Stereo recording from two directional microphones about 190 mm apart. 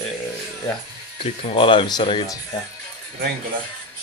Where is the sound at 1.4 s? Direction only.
30° left (ahead or behind).